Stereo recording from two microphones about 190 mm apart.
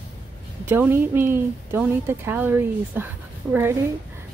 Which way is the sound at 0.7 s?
10° right (ahead or behind).